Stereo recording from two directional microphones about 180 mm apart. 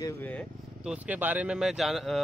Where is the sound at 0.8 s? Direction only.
10° right (ahead or behind).